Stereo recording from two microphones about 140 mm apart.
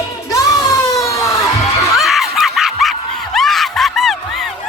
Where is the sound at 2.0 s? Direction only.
Centre (ahead or behind).